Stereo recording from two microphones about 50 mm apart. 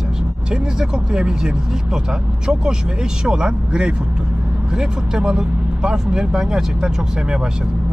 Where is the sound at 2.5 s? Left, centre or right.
Centre.